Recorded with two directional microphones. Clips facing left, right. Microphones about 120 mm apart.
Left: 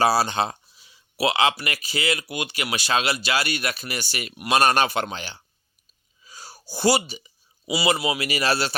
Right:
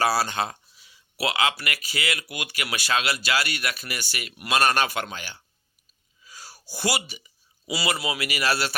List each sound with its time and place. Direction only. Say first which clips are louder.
0.0 s speech: left 3 dB; 25° left (ahead or behind)
6.2 s a sound: left 3 dB; 25° left (ahead or behind)
7.6 s speech: left 5 dB; 20° left (ahead or behind)